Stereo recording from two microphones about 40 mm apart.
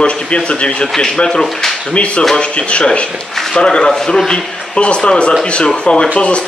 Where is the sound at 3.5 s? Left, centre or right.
Left.